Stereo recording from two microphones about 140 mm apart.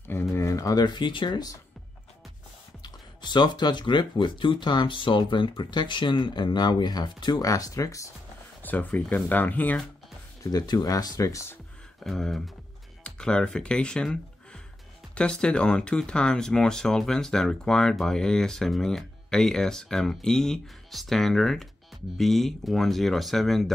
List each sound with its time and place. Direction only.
0.1 s speech: 20° left (ahead or behind)
2.8 s speech: 30° left (ahead or behind)
8.6 s speech: 10° left (ahead or behind)
10.4 s speech: 30° left (ahead or behind)
12.0 s speech: 5° left (ahead or behind)